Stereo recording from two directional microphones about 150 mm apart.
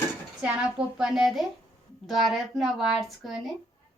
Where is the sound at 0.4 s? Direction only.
5° right (ahead or behind).